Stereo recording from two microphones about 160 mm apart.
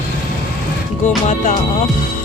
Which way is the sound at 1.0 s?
50° left (ahead or behind).